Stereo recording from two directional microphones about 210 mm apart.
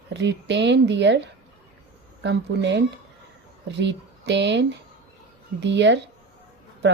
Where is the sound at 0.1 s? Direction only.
55° right (ahead or behind).